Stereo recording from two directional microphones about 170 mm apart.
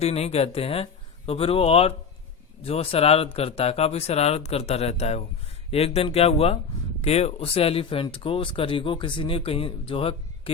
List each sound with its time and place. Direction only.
0.0 s speech: 40° left (ahead or behind)